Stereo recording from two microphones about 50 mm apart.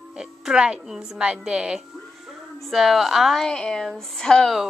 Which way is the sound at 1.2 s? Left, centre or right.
Right.